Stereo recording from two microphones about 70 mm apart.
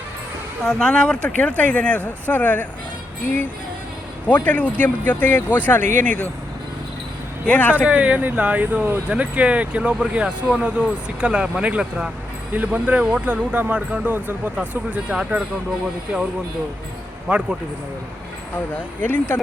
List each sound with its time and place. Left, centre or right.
0.6 s speech: centre
4.3 s speech: left
7.4 s speech: left
7.9 s speech: centre
17.3 s speech: centre
18.5 s speech: left